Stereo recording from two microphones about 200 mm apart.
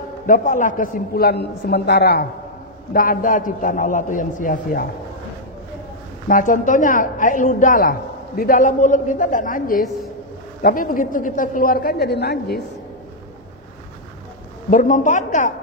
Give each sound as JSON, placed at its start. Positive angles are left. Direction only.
{"t": 0.3, "sound": "a woman's voice", "side_deg": 40}
{"t": 6.2, "sound": "a woman's voice", "side_deg": 40}
{"t": 14.7, "sound": "a woman's voice", "side_deg": 40}